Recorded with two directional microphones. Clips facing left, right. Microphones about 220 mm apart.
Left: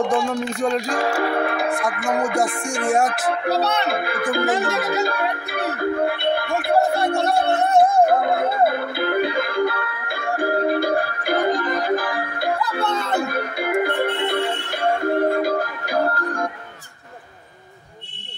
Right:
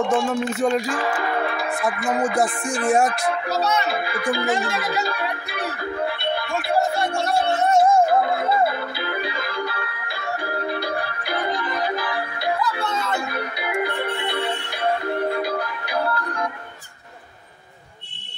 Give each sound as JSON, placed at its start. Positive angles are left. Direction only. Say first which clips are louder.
{"t": 0.1, "sound": "music", "louder": "even", "side_deg": -5}
{"t": 0.8, "sound": "speech", "louder": "left 3 dB", "side_deg": 45}
{"t": 1.4, "sound": "music", "louder": "left 4 dB", "side_deg": 55}
{"t": 2.0, "sound": "music", "louder": "left 1 dB", "side_deg": 0}
{"t": 3.3, "sound": "speech", "louder": "left 2 dB", "side_deg": 60}
{"t": 4.6, "sound": "music", "louder": "left 4 dB", "side_deg": 50}